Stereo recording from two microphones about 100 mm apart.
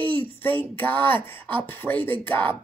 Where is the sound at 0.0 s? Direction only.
65° right (ahead or behind).